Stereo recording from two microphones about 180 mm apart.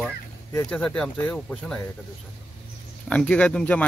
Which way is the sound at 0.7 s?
5° left (ahead or behind).